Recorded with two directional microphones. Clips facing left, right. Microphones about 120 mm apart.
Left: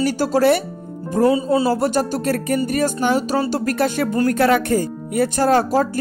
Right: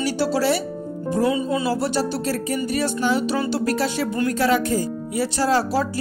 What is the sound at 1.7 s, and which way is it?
Speech, 50° left (ahead or behind).